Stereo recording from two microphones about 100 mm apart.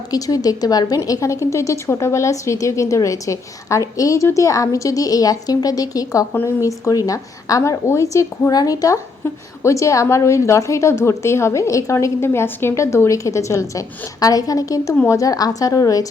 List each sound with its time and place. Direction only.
0.1 s a woman's voice: 35° left (ahead or behind)